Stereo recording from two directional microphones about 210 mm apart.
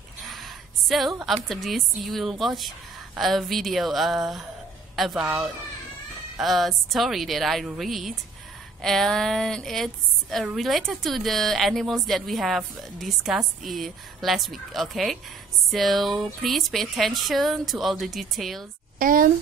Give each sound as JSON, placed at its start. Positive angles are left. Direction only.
{"t": 0.2, "sound": "a sound", "side_deg": 0}
{"t": 1.2, "sound": "speech", "side_deg": 0}
{"t": 18.9, "sound": "a woman's voice", "side_deg": -40}